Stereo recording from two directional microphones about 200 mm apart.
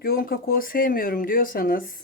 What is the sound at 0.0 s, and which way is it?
Speech, 50° left (ahead or behind).